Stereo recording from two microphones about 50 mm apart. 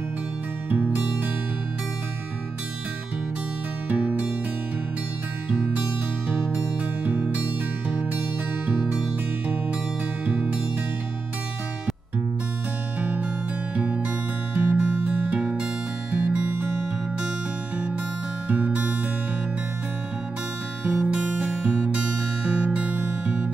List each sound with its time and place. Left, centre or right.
0.7 s music: right
3.9 s music: right
5.7 s music: right
6.5 s music: right
10.2 s music: right
13.0 s music: right
14.5 s music: right
18.5 s music: right
20.8 s music: right